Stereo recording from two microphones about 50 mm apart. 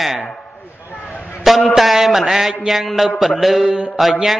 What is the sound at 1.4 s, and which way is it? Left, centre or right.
A man's voice, centre.